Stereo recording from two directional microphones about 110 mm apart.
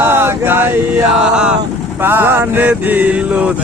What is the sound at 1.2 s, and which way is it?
Speech, 10° right (ahead or behind).